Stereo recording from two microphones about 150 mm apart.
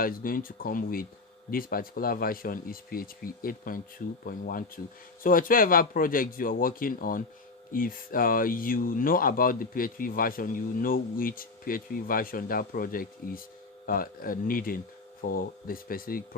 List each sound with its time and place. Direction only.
0.0 s speech: 70° left (ahead or behind)